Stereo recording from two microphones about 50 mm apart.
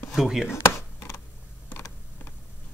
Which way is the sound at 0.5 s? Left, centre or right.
Left.